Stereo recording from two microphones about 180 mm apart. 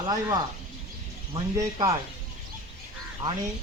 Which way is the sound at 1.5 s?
20° right (ahead or behind).